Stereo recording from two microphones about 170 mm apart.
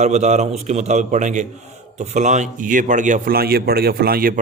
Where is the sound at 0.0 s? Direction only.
40° right (ahead or behind).